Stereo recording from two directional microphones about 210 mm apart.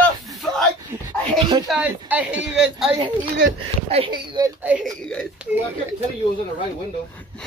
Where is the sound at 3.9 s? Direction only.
25° right (ahead or behind).